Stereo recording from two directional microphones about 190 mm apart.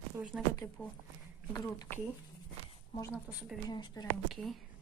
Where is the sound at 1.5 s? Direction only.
15° left (ahead or behind).